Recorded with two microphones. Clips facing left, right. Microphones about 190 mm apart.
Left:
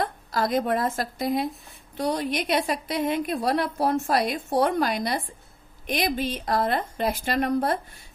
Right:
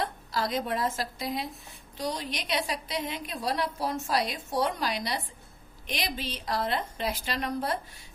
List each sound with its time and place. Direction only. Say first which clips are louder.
0.0 s a woman's voice: left 4 dB; 50° left (ahead or behind)